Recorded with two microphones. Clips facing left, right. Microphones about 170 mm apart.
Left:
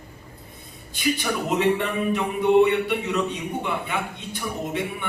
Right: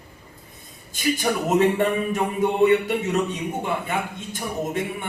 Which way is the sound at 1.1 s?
45° right (ahead or behind).